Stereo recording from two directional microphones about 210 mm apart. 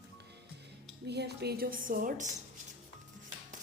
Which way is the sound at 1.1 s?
50° right (ahead or behind).